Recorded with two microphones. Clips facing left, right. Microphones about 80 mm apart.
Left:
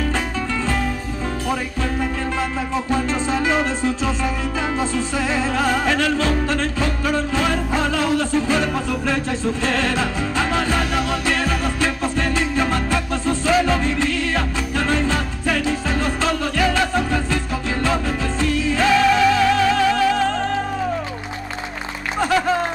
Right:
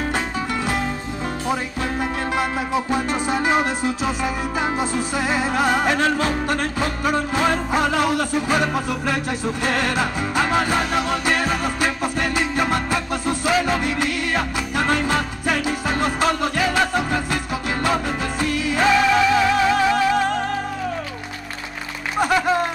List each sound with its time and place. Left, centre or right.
2.7 s music: centre
5.9 s music: right
6.4 s music: centre
16.5 s music: centre
18.5 s music: right
18.8 s music: centre